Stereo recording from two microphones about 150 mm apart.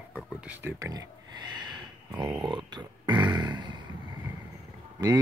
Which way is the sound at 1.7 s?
30° right (ahead or behind).